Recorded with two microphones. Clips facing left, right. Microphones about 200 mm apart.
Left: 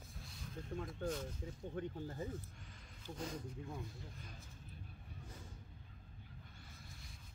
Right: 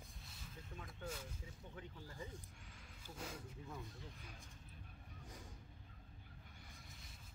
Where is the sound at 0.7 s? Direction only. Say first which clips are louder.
Left 8 dB; 50° left (ahead or behind).